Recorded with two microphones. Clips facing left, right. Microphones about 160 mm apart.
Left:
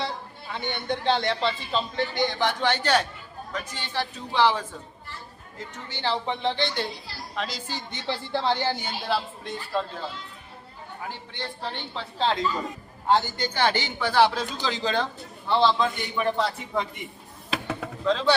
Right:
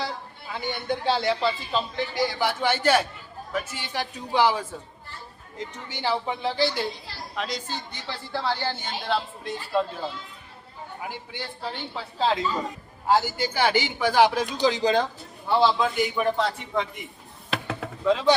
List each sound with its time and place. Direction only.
0.5 s a man's voice: 5° right (ahead or behind)
7.9 s a woman's voice: 25° left (ahead or behind)
9.0 s speech: centre (ahead or behind)
11.0 s a man's voice: 10° right (ahead or behind)
17.7 s chop: 10° right (ahead or behind)